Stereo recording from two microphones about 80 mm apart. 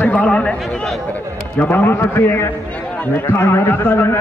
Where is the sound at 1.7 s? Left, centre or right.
Left.